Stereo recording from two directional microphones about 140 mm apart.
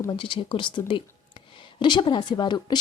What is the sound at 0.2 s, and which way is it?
A woman's voice, 35° left (ahead or behind).